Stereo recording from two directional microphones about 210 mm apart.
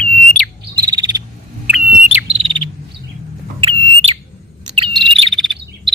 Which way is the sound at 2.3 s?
25° right (ahead or behind).